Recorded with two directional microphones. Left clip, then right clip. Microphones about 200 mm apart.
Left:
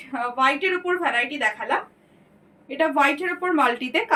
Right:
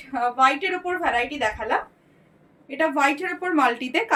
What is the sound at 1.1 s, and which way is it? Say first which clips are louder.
A woman's voice: left 1 dB; 15° right (ahead or behind).